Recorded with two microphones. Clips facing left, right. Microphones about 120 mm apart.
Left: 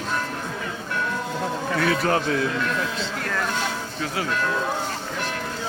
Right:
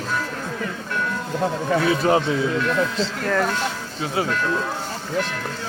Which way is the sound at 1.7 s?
20° right (ahead or behind).